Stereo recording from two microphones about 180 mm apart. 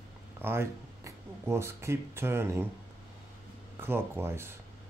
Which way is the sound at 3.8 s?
15° right (ahead or behind).